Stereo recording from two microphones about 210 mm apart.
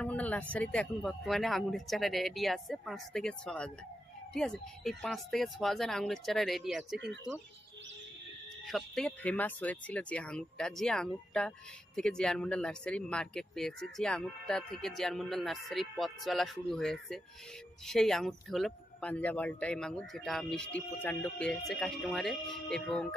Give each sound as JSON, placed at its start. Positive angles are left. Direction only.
{"t": 0.0, "sound": "speech", "side_deg": 5}
{"t": 8.6, "sound": "speech", "side_deg": 0}